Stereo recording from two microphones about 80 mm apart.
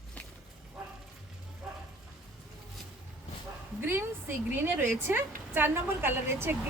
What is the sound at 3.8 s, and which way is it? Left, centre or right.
A woman's voice, right.